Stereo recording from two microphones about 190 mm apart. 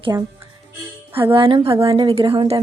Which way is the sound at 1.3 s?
30° right (ahead or behind).